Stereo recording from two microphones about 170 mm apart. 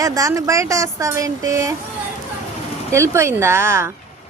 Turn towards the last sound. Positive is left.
turn(degrees=-15)  # may be behind; listen again after turning